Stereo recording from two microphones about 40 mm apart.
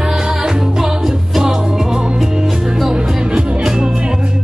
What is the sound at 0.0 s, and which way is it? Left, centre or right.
Music, centre.